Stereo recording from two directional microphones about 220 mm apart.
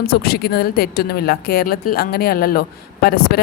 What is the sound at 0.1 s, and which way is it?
A woman's voice, 45° left (ahead or behind).